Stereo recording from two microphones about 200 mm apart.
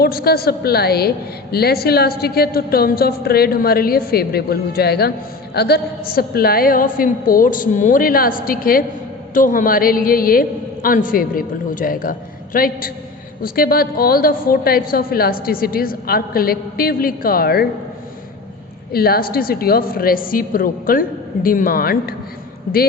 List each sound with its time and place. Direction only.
0.0 s a woman's voice: 50° left (ahead or behind)
18.9 s a woman's voice: 50° left (ahead or behind)